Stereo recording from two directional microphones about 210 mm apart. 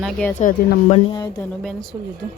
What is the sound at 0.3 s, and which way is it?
Speech, 35° left (ahead or behind).